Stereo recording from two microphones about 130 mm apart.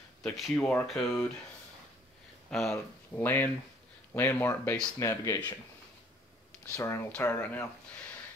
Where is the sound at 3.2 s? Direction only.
15° left (ahead or behind).